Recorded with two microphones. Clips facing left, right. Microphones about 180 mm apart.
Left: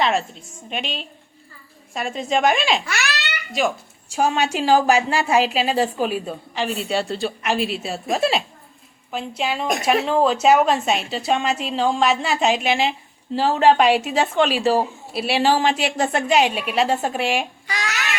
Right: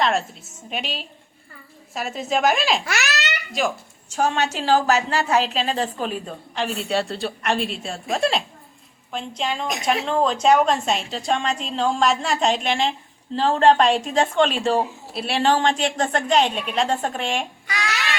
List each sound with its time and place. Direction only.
0.0 s speech: centre (ahead or behind)
2.8 s babbling: 40° right (ahead or behind)
3.6 s a woman's voice: centre (ahead or behind)